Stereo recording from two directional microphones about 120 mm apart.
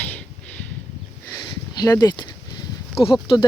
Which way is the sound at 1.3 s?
30° left (ahead or behind).